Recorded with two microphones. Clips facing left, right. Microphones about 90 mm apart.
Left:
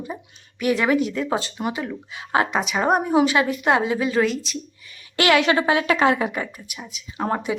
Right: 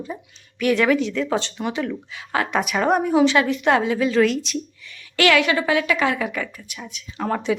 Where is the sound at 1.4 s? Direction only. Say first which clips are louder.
Right 1 dB; 15° left (ahead or behind).